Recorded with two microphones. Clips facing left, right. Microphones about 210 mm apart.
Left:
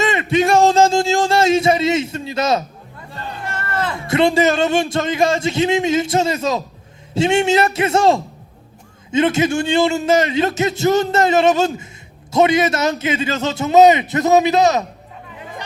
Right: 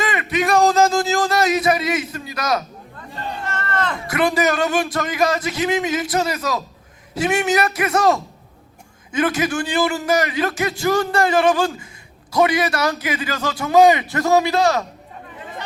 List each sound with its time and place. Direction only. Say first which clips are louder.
0.0 s speech: left 5 dB; 25° left (ahead or behind)
3.4 s a sound: left 1 dB; 10° left (ahead or behind)
4.0 s a man's voice: left 5 dB; 25° left (ahead or behind)